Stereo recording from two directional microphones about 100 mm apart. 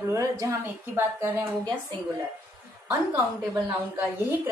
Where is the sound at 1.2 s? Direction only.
20° right (ahead or behind).